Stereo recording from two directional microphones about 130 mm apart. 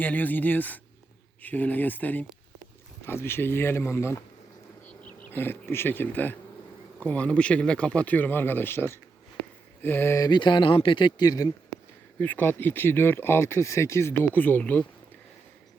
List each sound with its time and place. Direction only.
0.0 s speech: 15° left (ahead or behind)
5.0 s bee: 15° left (ahead or behind)
7.0 s speech: 10° left (ahead or behind)
10.2 s speech: 35° left (ahead or behind)
12.2 s speech: 15° left (ahead or behind)